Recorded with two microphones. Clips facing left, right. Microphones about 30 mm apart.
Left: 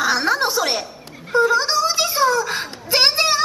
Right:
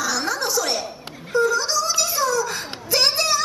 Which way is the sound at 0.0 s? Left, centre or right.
Left.